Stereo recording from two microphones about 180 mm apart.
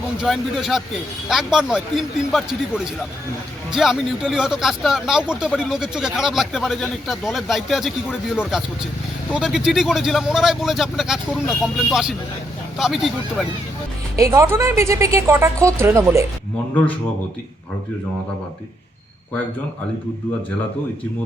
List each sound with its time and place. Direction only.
0.2 s speech: centre (ahead or behind)
14.2 s a woman's voice: 15° right (ahead or behind)